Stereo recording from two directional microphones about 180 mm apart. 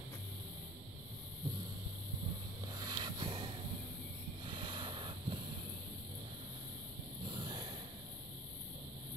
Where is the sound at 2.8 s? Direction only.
25° right (ahead or behind).